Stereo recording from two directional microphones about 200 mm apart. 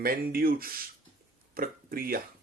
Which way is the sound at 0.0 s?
45° right (ahead or behind).